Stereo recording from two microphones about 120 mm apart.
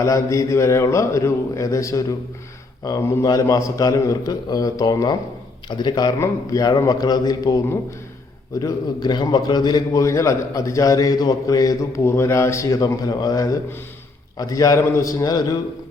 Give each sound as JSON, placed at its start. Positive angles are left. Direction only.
{"t": 0.0, "sound": "a man's voice", "side_deg": 25}